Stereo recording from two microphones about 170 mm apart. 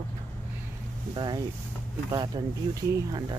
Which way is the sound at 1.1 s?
25° right (ahead or behind).